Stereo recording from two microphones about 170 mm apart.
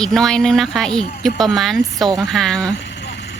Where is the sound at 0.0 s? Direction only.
Centre (ahead or behind).